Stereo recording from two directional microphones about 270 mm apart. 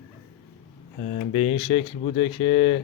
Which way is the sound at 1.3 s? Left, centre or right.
Left.